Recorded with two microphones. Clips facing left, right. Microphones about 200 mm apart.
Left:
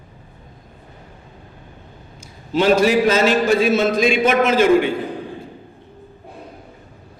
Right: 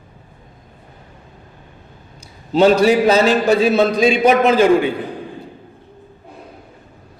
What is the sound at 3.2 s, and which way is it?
A man's voice, 35° right (ahead or behind).